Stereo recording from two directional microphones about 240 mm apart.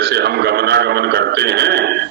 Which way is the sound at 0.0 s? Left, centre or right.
Right.